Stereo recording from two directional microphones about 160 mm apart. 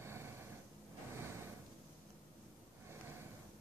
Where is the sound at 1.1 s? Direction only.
15° right (ahead or behind).